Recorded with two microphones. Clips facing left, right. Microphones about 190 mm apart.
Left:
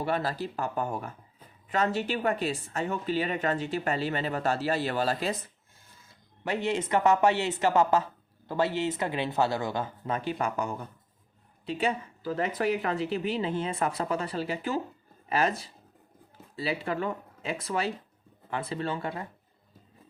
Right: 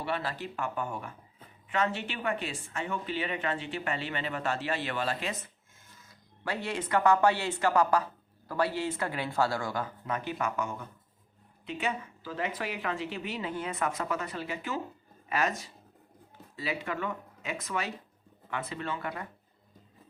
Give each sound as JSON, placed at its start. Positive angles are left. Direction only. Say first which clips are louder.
{"t": 0.0, "sound": "speech", "louder": "left 4 dB", "side_deg": 40}
{"t": 6.1, "sound": "speech", "louder": "left 4 dB", "side_deg": 25}